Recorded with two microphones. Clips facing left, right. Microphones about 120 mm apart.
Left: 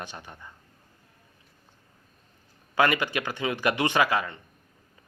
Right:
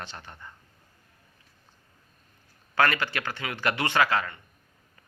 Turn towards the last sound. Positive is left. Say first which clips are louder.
# left 1 dB
turn(degrees=15)  # may be behind; listen again after turning